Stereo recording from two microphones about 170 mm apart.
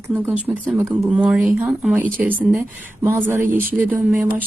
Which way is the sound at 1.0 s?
5° right (ahead or behind).